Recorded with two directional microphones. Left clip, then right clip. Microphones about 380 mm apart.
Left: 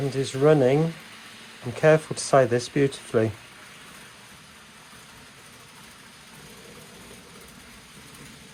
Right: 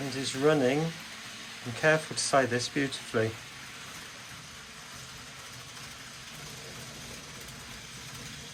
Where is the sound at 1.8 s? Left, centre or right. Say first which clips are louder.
Left 6 dB; centre.